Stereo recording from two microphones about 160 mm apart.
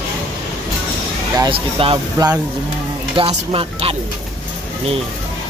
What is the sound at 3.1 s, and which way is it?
Speech, 35° right (ahead or behind).